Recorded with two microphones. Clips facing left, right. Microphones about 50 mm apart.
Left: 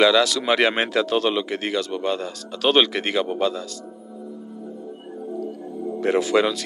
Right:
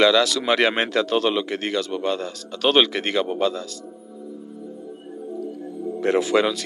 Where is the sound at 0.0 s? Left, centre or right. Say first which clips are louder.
Even; centre.